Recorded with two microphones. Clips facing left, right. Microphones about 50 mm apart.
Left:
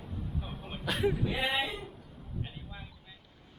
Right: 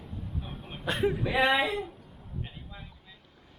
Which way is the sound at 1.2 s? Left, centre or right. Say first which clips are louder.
Right 6 dB; right.